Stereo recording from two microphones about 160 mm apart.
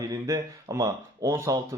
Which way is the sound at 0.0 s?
20° right (ahead or behind).